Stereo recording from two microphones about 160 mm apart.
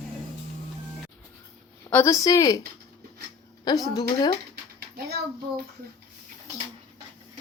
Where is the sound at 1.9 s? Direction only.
15° left (ahead or behind).